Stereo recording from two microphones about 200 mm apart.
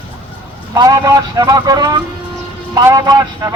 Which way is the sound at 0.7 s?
20° right (ahead or behind).